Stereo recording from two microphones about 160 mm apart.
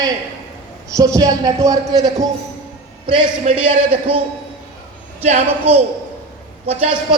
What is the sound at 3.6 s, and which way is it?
Speech, 35° right (ahead or behind).